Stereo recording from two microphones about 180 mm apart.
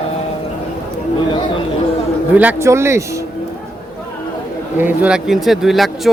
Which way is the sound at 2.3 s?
10° right (ahead or behind).